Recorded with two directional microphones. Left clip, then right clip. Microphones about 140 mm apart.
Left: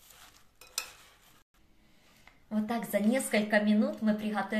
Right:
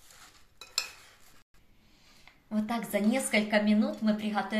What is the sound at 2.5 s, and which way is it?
A woman's voice, 20° left (ahead or behind).